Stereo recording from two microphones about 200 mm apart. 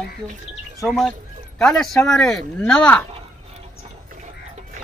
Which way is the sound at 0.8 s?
Centre (ahead or behind).